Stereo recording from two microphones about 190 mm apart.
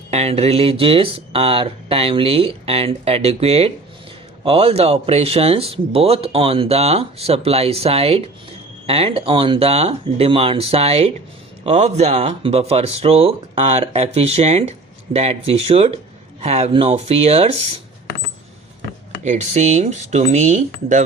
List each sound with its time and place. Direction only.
0.1 s speech: 35° right (ahead or behind)
19.2 s speech: 40° right (ahead or behind)